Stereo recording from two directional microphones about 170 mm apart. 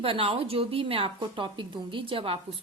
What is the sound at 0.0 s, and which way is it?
A woman's voice, 30° right (ahead or behind).